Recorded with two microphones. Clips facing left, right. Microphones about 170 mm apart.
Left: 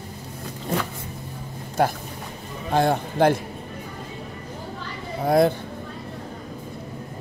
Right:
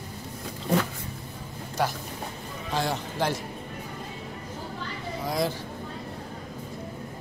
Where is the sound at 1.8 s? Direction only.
55° left (ahead or behind).